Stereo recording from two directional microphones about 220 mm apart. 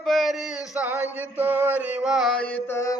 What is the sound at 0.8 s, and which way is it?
Mantra, 10° right (ahead or behind).